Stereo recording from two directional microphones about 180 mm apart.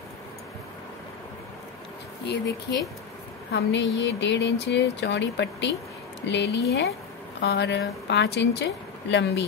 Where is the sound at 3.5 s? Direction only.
75° left (ahead or behind).